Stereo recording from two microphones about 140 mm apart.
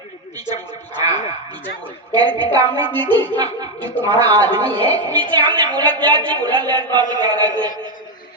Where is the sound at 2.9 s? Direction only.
15° left (ahead or behind).